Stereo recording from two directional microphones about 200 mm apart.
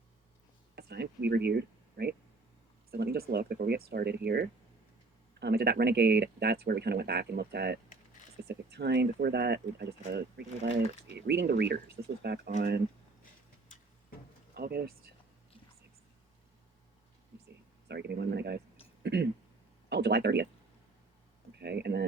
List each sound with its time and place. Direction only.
0.8 s speech: 55° right (ahead or behind)
14.5 s speech: 50° right (ahead or behind)
17.8 s speech: 55° right (ahead or behind)
21.6 s speech: 55° right (ahead or behind)